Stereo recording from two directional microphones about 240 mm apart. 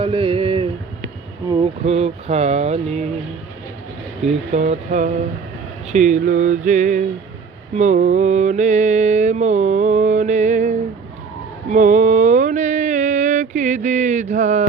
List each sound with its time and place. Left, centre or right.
0.0 s a sound: right
1.5 s speech: right
4.2 s speech: right
5.9 s mantra: right